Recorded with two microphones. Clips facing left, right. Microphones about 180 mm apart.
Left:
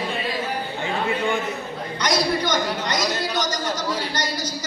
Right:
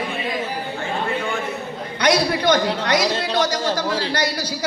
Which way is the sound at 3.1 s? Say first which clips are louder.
Right 3 dB; 30° right (ahead or behind).